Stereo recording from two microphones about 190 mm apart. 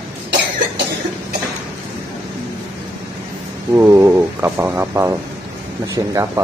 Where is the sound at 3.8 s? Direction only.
15° right (ahead or behind).